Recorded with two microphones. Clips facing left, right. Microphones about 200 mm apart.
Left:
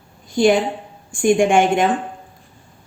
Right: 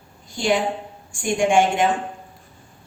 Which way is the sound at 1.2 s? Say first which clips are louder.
Left 4 dB; 55° left (ahead or behind).